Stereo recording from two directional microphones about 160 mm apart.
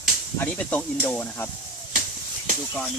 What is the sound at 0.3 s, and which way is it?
Speech, 10° left (ahead or behind).